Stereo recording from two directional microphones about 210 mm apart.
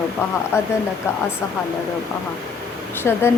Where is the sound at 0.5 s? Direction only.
15° left (ahead or behind).